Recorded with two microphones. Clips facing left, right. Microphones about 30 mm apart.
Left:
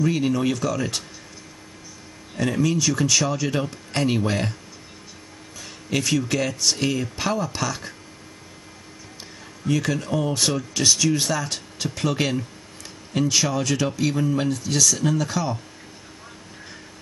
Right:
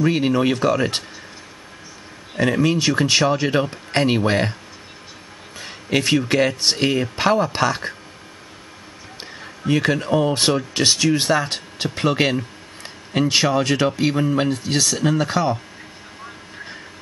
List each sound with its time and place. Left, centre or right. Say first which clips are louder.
0.0 s speech: right 4 dB; right
2.3 s speech: right 4 dB; right
5.6 s speech: right 5 dB; right
9.4 s speech: right 4 dB; right